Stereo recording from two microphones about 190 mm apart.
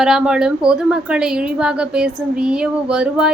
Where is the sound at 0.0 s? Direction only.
5° right (ahead or behind).